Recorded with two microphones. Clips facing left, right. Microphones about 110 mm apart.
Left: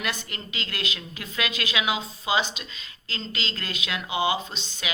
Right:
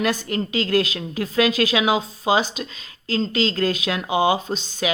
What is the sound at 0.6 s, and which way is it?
Speech, 40° right (ahead or behind).